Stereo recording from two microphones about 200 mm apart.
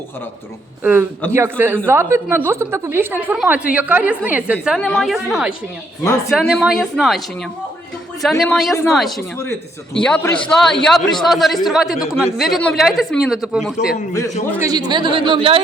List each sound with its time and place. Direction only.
0.8 s a woman's voice: 10° right (ahead or behind)
8.2 s speech: centre (ahead or behind)
14.6 s speech: 20° right (ahead or behind)